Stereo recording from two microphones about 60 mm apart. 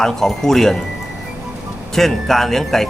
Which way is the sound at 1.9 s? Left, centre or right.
Centre.